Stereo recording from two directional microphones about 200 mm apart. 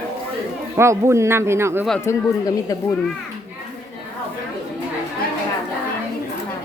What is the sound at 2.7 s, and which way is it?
Speech, 15° left (ahead or behind).